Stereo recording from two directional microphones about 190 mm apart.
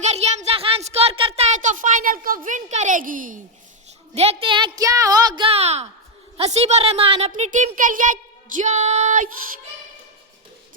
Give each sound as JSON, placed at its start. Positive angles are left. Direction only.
{"t": 0.0, "sound": "speech", "side_deg": -35}
{"t": 4.1, "sound": "a woman's voice", "side_deg": -30}